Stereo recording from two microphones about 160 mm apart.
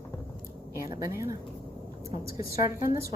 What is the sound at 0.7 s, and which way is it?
Speech, 20° right (ahead or behind).